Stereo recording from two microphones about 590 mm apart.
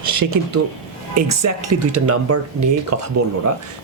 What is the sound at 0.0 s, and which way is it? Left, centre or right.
Speech, right.